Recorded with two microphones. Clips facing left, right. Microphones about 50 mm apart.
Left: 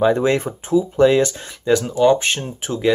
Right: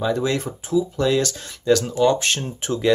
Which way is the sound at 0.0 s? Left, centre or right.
Left.